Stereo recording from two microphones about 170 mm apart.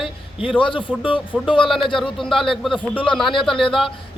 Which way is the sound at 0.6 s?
30° left (ahead or behind).